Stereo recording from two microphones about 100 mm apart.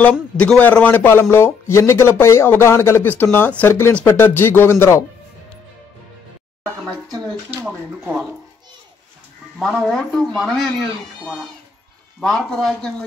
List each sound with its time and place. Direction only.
0.0 s a man's voice: 10° left (ahead or behind)
7.6 s speech: 5° right (ahead or behind)
9.6 s speech: centre (ahead or behind)